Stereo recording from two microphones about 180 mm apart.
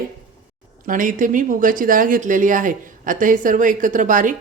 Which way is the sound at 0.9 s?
45° right (ahead or behind).